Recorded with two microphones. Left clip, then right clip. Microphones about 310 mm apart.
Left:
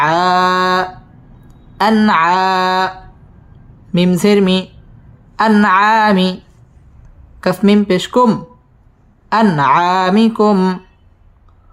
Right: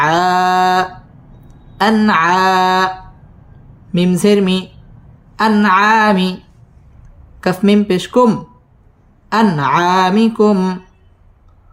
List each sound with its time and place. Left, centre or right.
0.0 s mantra: centre
1.5 s speech: centre
3.9 s speech: centre
7.4 s speech: centre